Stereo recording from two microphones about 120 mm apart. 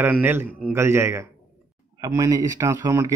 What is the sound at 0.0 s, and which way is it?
A man's voice, 15° right (ahead or behind).